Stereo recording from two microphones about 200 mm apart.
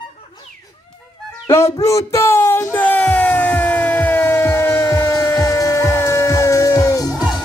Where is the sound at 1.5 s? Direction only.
15° left (ahead or behind).